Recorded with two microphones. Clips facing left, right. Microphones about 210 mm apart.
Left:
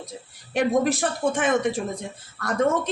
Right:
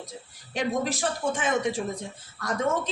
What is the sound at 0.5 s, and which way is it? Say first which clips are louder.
A man's voice: left 6 dB; 60° left (ahead or behind).